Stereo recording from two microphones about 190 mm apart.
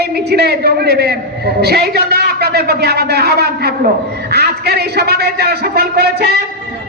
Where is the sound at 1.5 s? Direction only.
55° right (ahead or behind).